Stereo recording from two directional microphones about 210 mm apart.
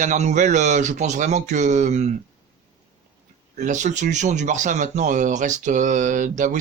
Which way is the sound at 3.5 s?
35° right (ahead or behind).